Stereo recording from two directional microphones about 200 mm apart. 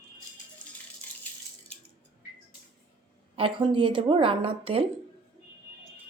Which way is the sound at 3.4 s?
25° right (ahead or behind).